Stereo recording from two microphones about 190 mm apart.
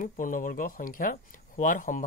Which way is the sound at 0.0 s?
45° left (ahead or behind).